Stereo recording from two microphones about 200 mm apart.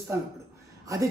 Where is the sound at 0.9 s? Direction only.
15° right (ahead or behind).